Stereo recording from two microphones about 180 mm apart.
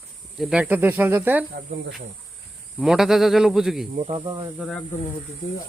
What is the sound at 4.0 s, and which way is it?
Speech, 35° right (ahead or behind).